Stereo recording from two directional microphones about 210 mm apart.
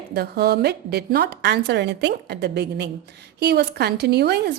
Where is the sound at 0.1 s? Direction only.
50° right (ahead or behind).